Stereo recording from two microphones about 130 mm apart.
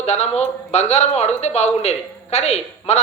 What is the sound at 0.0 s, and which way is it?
Speech, 55° left (ahead or behind).